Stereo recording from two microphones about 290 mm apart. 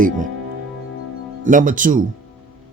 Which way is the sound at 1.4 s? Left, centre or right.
Right.